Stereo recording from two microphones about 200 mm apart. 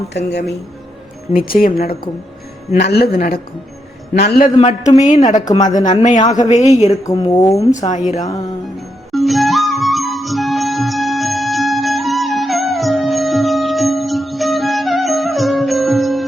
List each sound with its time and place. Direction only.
0.3 s speech: 55° left (ahead or behind)
1.3 s a woman's voice: 45° left (ahead or behind)
2.7 s a woman's voice: 55° left (ahead or behind)
4.6 s speech: 35° left (ahead or behind)
5.5 s speech: 20° left (ahead or behind)
5.7 s speech: 40° left (ahead or behind)
6.9 s speech: 20° left (ahead or behind)
7.7 s speech: 40° left (ahead or behind)
9.1 s music: centre (ahead or behind)